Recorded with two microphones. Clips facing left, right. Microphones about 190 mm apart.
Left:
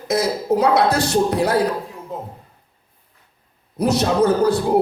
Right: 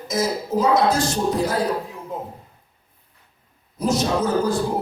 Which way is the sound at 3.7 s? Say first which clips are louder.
Left 4 dB; 65° left (ahead or behind).